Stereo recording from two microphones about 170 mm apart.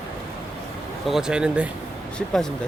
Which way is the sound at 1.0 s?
Centre (ahead or behind).